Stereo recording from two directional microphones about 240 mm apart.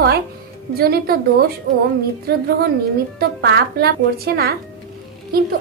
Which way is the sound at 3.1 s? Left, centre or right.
Right.